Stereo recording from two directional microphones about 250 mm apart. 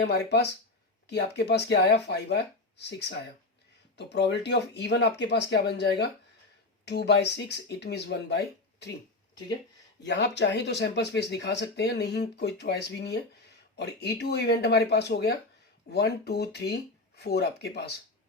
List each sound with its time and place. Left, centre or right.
0.0 s speech: left
10.0 s speech: left